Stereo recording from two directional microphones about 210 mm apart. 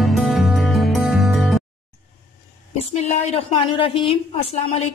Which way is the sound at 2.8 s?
30° left (ahead or behind).